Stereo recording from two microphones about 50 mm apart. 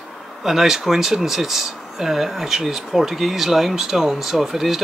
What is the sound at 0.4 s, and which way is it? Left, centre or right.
Speech, centre.